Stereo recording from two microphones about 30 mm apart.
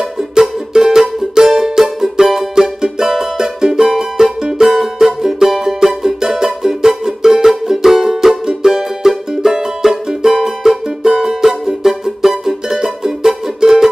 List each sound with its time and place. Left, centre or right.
0.3 s music: centre